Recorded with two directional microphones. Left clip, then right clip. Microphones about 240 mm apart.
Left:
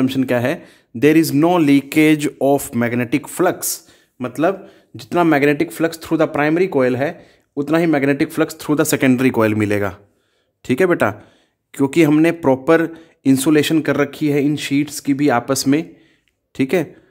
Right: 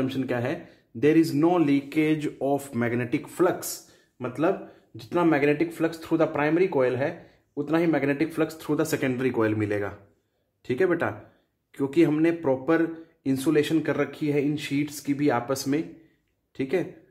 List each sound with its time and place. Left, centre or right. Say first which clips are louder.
0.0 s speech: left 10 dB; left